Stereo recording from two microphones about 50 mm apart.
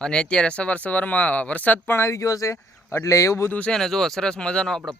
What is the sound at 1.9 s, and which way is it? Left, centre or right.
Speech, left.